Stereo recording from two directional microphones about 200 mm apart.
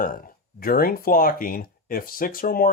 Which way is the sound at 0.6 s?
45° left (ahead or behind).